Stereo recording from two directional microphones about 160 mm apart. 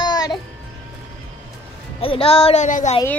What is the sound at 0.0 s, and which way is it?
Music, 25° left (ahead or behind).